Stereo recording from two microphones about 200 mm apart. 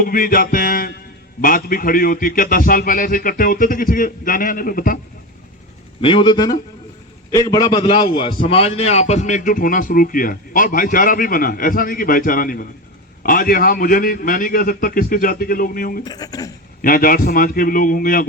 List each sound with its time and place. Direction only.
0.0 s music: 45° left (ahead or behind)
1.4 s a man's voice: 45° left (ahead or behind)
6.0 s a man's voice: 25° left (ahead or behind); by 16.0 s 45° left (ahead or behind)
16.0 s a man's voice: 20° left (ahead or behind)
16.8 s a man's voice: 45° left (ahead or behind)